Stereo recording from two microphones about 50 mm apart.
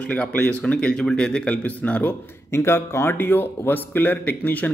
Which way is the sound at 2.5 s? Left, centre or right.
Left.